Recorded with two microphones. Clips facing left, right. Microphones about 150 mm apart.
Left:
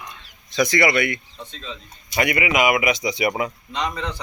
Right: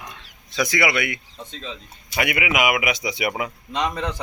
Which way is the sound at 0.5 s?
5° right (ahead or behind).